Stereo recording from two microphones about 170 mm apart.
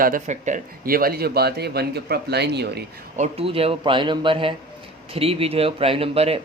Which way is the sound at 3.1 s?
40° right (ahead or behind).